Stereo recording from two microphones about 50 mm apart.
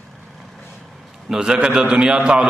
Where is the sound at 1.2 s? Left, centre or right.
Centre.